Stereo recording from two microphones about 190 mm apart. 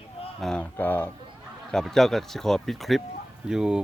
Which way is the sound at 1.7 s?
Centre (ahead or behind).